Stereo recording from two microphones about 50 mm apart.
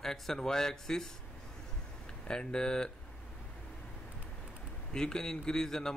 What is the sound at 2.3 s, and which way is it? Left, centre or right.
Speech, centre.